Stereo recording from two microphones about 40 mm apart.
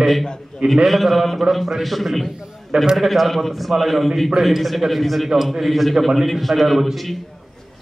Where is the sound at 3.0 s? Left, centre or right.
Centre.